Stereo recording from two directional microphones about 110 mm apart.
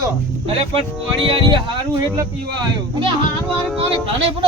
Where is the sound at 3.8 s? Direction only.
55° right (ahead or behind).